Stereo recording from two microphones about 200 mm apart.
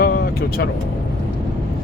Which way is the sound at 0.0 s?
50° left (ahead or behind).